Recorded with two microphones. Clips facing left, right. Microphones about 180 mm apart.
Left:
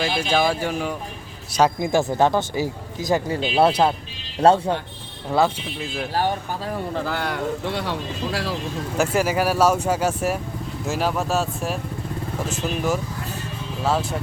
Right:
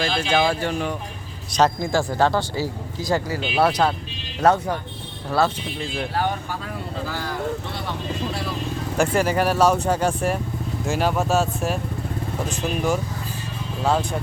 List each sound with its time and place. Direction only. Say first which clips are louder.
0.0 s speech: even; 10° left (ahead or behind)
5.8 s speech: right 1 dB; 5° left (ahead or behind)
6.9 s speech: even; 60° left (ahead or behind); by 8.5 s 90° left
9.0 s speech: right 1 dB; 5° left (ahead or behind)